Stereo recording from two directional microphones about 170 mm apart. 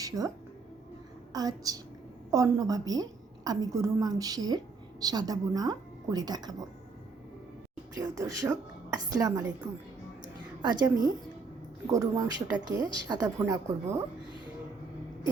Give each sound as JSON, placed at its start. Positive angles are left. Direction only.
{"t": 0.1, "sound": "a woman's voice", "side_deg": -20}
{"t": 7.9, "sound": "a woman's voice", "side_deg": -20}
{"t": 10.6, "sound": "a woman's voice", "side_deg": -25}